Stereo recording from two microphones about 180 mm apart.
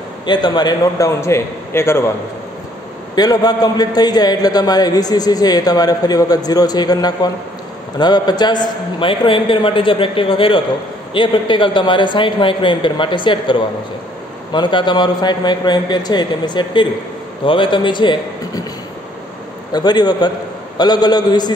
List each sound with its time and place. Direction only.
0.3 s a man's voice: 25° left (ahead or behind)
3.2 s a man's voice: 20° left (ahead or behind)
19.7 s a man's voice: 20° left (ahead or behind)